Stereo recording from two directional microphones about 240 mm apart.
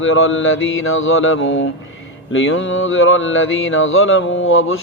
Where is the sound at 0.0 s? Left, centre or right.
Left.